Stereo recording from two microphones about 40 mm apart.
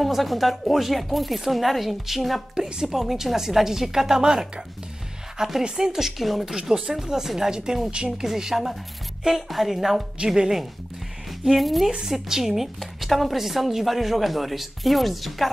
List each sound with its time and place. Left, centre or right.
0.0 s speech: centre
2.5 s a woman's voice: centre
5.6 s a woman's voice: centre
6.5 s a woman's voice: centre
10.1 s speech: centre
11.5 s speech: centre
11.9 s a woman's voice: centre